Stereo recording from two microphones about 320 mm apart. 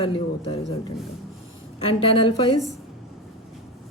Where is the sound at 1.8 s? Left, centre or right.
Centre.